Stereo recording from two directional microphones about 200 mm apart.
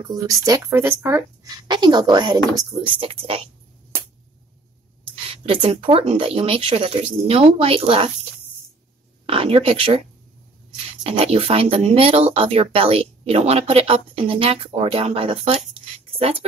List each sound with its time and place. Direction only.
0.1 s speech: 20° right (ahead or behind)
5.3 s speech: 25° right (ahead or behind)
9.2 s speech: 30° right (ahead or behind)
11.1 s speech: 30° right (ahead or behind)